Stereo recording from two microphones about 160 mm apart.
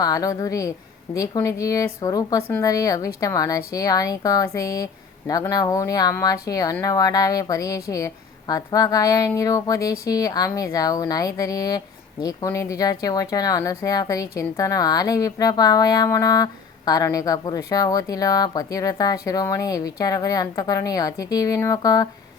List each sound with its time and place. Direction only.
0.0 s speech: 20° left (ahead or behind)